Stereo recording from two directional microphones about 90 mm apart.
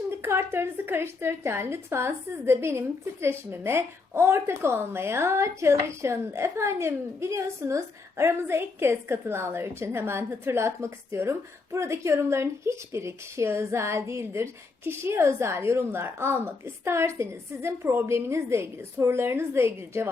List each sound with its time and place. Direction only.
0.2 s a woman's voice: 30° right (ahead or behind)